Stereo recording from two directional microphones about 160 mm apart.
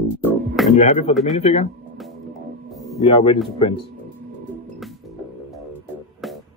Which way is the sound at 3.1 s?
35° left (ahead or behind).